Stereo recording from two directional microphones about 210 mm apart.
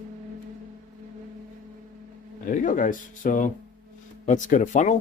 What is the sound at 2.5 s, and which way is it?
Speech, 40° left (ahead or behind).